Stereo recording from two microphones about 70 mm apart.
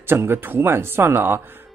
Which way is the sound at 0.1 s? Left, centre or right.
Right.